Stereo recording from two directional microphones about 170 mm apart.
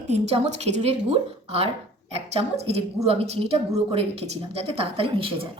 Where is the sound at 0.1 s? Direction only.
35° right (ahead or behind).